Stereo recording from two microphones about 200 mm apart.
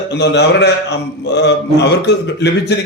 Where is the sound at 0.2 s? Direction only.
55° left (ahead or behind).